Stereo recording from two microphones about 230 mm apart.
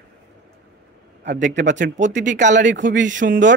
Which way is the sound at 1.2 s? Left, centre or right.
Right.